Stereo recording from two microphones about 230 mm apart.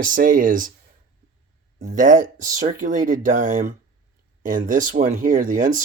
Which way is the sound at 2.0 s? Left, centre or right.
Right.